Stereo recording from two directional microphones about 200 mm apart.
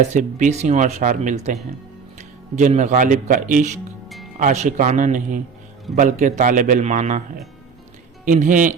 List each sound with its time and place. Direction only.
0.0 s speech: 35° right (ahead or behind)
2.6 s speech: 35° right (ahead or behind)
8.2 s speech: 40° right (ahead or behind)